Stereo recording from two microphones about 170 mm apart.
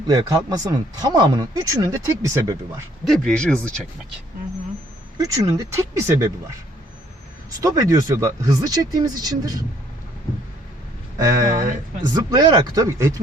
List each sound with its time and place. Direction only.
0.1 s speech: 20° right (ahead or behind)
3.0 s speech: centre (ahead or behind)
5.1 s speech: 20° right (ahead or behind)
7.6 s speech: 20° right (ahead or behind)
11.2 s speech: 20° right (ahead or behind)